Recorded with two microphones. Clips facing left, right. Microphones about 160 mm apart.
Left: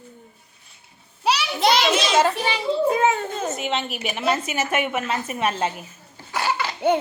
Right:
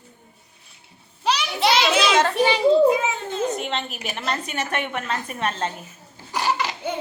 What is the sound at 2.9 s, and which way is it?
Speech, 55° left (ahead or behind).